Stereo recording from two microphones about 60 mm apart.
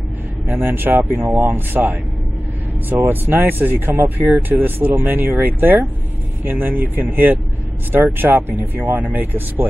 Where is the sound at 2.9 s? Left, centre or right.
Right.